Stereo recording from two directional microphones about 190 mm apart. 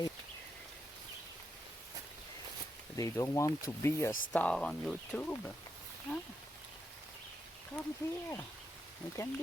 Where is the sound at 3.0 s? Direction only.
15° left (ahead or behind).